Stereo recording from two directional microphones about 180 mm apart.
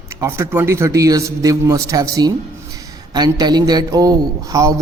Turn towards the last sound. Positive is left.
turn(degrees=-20)  # may be behind; listen again after turning